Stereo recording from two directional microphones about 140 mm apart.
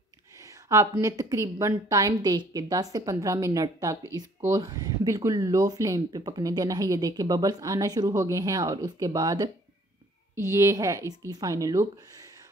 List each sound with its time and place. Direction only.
0.4 s a woman's voice: 20° right (ahead or behind)